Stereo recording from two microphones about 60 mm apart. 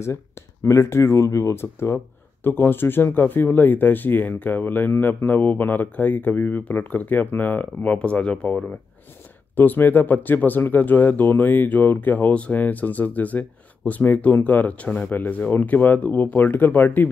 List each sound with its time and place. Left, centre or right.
0.7 s speech: left
1.6 s speech: left